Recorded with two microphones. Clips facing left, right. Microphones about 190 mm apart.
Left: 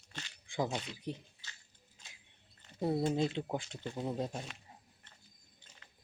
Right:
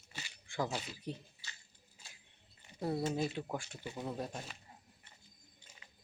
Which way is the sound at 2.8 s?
20° left (ahead or behind).